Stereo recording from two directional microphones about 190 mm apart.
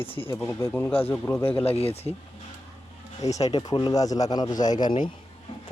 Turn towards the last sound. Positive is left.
turn(degrees=25)  # may be behind; listen again after turning